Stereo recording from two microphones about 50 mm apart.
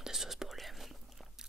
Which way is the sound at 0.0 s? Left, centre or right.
Centre.